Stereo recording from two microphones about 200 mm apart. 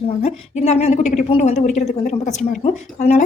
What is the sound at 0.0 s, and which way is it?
A woman's voice, 30° left (ahead or behind).